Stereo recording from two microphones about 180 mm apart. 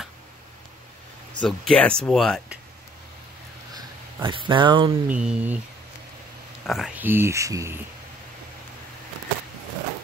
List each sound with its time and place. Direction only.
1.4 s speech: 5° left (ahead or behind)
3.7 s a sound: 25° right (ahead or behind)
5.0 s speech: 5° right (ahead or behind)
6.7 s speech: 5° right (ahead or behind)